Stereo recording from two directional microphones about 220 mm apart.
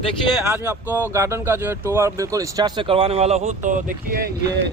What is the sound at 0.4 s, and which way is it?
A man's voice, 10° right (ahead or behind).